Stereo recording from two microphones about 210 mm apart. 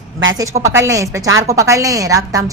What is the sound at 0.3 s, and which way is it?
A woman's voice, 15° right (ahead or behind).